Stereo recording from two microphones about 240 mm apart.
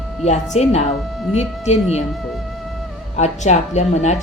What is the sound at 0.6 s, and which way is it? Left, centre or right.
A woman's voice, left.